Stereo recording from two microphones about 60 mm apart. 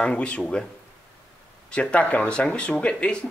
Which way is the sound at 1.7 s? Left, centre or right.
Centre.